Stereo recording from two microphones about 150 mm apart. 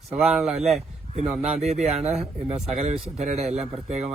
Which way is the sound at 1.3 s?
45° right (ahead or behind).